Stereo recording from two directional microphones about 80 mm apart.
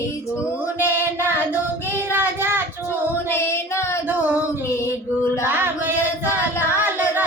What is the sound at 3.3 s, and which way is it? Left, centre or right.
Child singing, left.